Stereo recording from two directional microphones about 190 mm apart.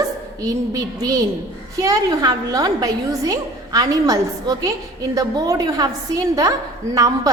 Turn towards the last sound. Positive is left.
turn(degrees=-20)  # may be behind; listen again after turning